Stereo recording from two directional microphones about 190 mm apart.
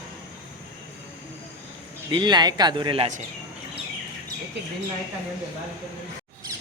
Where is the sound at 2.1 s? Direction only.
25° right (ahead or behind).